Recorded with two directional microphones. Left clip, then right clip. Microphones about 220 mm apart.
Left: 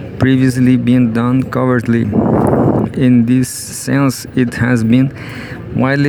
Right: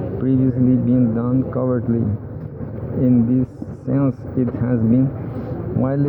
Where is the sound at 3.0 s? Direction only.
50° left (ahead or behind).